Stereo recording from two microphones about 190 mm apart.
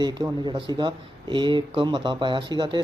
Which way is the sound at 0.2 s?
20° right (ahead or behind).